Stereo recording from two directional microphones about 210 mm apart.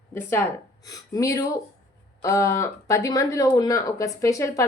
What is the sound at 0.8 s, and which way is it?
Speech, 15° left (ahead or behind).